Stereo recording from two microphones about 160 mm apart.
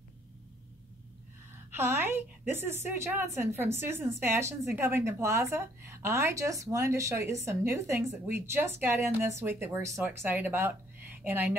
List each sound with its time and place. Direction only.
1.7 s a woman's voice: 15° right (ahead or behind)